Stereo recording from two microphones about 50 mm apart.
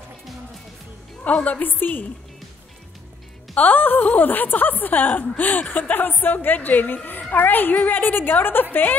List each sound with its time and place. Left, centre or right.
1.2 s a woman's voice: left
3.5 s a woman's voice: left